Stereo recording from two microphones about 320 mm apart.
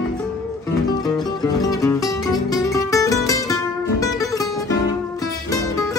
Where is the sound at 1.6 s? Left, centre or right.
Centre.